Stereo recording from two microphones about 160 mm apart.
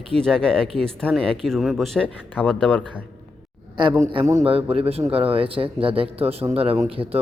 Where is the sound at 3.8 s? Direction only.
30° right (ahead or behind).